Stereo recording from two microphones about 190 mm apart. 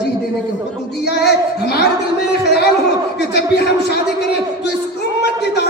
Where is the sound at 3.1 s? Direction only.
60° left (ahead or behind).